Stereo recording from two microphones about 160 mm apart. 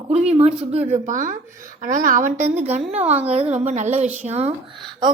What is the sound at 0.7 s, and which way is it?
A woman's voice, 45° right (ahead or behind).